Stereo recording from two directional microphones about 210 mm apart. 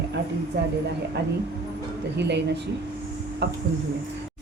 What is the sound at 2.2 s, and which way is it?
Speech, 55° right (ahead or behind).